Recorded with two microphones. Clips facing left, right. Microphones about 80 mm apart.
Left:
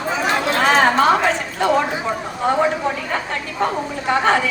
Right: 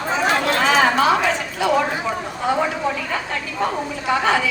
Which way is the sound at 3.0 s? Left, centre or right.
Left.